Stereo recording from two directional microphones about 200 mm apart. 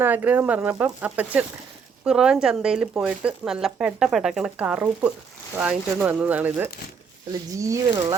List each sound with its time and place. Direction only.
0.0 s speech: 10° right (ahead or behind)